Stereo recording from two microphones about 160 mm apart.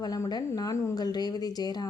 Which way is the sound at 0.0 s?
25° left (ahead or behind).